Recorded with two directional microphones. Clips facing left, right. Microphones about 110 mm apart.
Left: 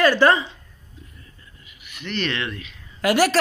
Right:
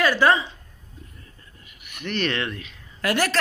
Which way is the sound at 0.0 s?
5° right (ahead or behind).